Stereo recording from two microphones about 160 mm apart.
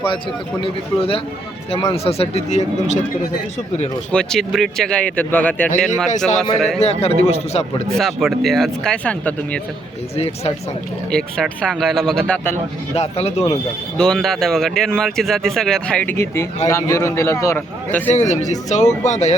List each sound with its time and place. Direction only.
0.6 s speech: 35° left (ahead or behind)
4.1 s speech: 5° left (ahead or behind)
6.1 s speech: 50° left (ahead or behind)
7.9 s speech: centre (ahead or behind)
10.2 s speech: 40° left (ahead or behind)
11.1 s speech: 5° left (ahead or behind)
12.9 s speech: 40° left (ahead or behind)
14.0 s a man's voice: 5° left (ahead or behind)
18.1 s speech: 45° left (ahead or behind)